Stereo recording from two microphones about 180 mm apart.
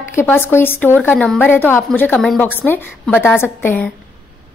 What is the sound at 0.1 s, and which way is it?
A woman's voice, 15° left (ahead or behind).